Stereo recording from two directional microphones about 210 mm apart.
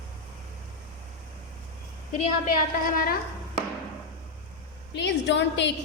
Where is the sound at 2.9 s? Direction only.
45° left (ahead or behind).